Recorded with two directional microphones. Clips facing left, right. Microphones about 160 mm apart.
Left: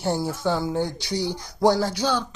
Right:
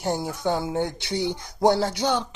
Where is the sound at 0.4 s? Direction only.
20° right (ahead or behind).